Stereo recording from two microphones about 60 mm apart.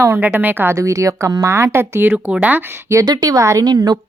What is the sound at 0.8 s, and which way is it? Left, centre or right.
Speech, right.